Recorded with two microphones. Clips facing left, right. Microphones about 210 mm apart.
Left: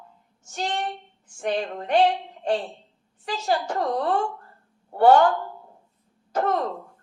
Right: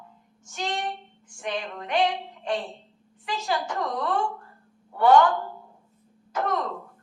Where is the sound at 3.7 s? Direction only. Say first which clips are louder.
Left 4 dB; 30° left (ahead or behind).